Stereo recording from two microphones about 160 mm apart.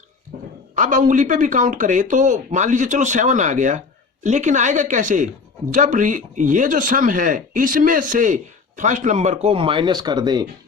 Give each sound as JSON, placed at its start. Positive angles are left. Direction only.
{"t": 0.8, "sound": "speech", "side_deg": -55}